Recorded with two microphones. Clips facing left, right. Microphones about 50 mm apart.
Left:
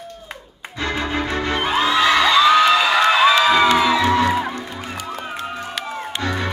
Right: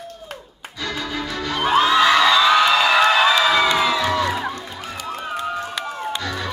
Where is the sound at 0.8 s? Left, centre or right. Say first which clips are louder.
Left 4 dB; left.